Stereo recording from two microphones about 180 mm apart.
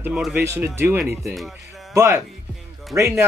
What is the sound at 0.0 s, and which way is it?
Speech, 5° right (ahead or behind).